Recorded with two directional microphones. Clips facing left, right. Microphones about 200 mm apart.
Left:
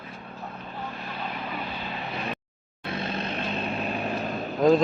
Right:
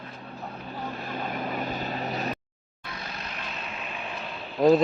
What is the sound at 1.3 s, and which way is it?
Vehicle, 45° right (ahead or behind).